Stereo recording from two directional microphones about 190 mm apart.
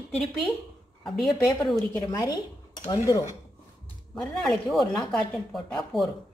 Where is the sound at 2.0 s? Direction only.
15° left (ahead or behind).